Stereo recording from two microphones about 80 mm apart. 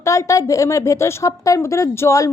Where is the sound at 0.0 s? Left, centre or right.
Left.